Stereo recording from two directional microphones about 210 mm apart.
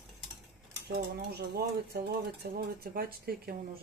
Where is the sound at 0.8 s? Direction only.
50° right (ahead or behind).